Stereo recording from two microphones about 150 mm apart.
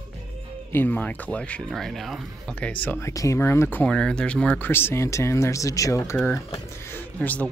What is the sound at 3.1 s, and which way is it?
Speech, 20° left (ahead or behind).